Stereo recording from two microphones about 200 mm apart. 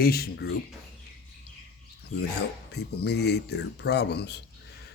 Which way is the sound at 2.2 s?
55° left (ahead or behind).